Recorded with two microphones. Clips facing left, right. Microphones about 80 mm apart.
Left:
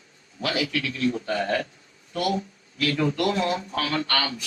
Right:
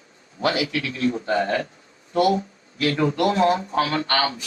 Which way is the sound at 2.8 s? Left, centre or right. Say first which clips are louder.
Right 3 dB; right.